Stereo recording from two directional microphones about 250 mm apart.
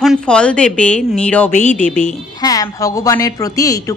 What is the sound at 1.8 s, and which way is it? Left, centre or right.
Speech, left.